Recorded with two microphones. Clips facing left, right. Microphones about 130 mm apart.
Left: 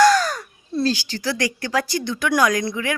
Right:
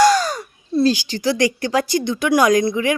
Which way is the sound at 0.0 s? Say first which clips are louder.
Right 1 dB; 15° right (ahead or behind).